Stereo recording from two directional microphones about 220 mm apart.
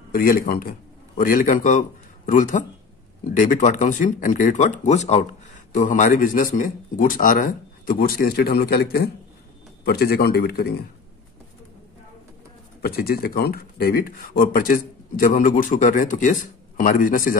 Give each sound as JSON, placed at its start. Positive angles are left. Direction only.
{"t": 0.1, "sound": "a man's voice", "side_deg": 40}
{"t": 12.8, "sound": "speech", "side_deg": 45}